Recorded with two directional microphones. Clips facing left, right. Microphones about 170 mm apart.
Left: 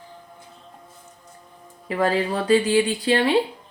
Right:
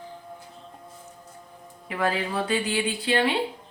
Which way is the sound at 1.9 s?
35° left (ahead or behind).